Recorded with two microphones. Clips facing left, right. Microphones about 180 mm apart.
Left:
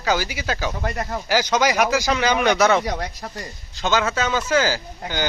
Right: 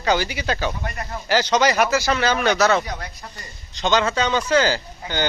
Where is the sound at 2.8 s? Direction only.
90° left.